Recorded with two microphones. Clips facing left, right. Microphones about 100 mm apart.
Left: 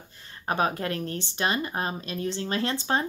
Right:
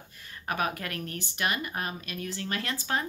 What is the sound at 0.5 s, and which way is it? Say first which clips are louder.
Speech: left 5 dB; 30° left (ahead or behind).